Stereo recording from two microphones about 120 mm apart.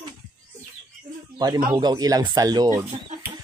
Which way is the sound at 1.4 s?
35° right (ahead or behind).